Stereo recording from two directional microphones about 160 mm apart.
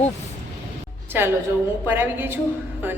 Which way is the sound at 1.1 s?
15° right (ahead or behind).